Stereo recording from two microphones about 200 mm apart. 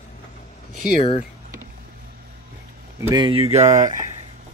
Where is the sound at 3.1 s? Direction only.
20° right (ahead or behind).